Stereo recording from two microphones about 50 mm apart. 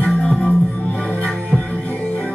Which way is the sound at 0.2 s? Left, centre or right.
Centre.